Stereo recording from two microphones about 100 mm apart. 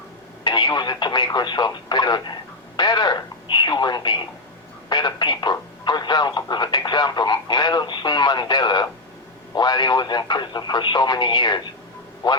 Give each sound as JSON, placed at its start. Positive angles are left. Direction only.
{"t": 0.4, "sound": "speech", "side_deg": 50}